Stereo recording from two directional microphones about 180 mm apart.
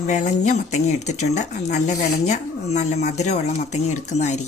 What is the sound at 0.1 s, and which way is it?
A woman's voice, 40° left (ahead or behind).